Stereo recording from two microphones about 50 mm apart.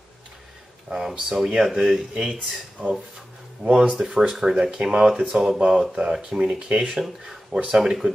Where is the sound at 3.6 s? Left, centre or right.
Right.